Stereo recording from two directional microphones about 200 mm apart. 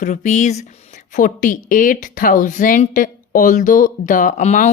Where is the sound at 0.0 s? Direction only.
40° left (ahead or behind).